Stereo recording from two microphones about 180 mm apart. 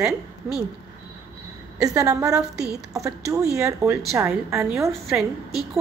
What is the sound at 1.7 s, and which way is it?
A woman's voice, 20° right (ahead or behind).